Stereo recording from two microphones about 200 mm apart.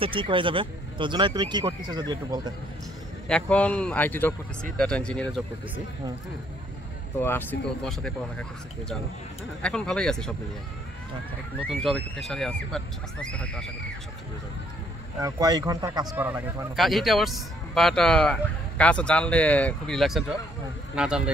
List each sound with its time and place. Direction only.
0.0 s speech: 25° right (ahead or behind)
3.3 s speech: 5° left (ahead or behind)
7.2 s speech: 10° left (ahead or behind)
11.6 s speech: centre (ahead or behind)
15.2 s a man's voice: 20° right (ahead or behind)
16.7 s speech: centre (ahead or behind)